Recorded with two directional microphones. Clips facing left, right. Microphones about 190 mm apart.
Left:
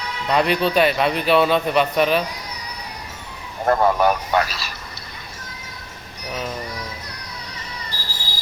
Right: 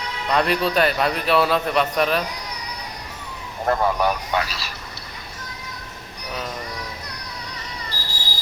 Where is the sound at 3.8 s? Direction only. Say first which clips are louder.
Left 3 dB; 50° left (ahead or behind).